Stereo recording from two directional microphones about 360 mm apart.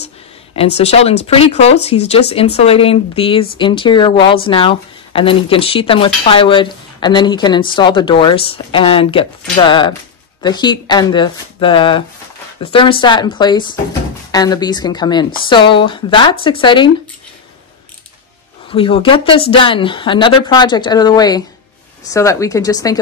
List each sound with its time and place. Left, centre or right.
0.6 s speech: centre
18.7 s speech: centre